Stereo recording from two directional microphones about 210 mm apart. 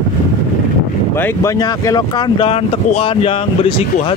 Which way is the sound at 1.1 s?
10° left (ahead or behind).